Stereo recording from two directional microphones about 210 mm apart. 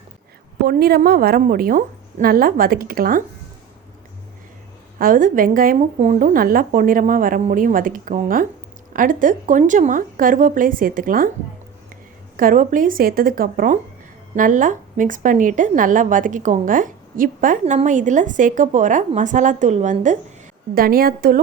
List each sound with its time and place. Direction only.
0.6 s a woman's voice: 45° right (ahead or behind)
4.9 s a woman's voice: 40° right (ahead or behind)
12.4 s a woman's voice: 40° right (ahead or behind)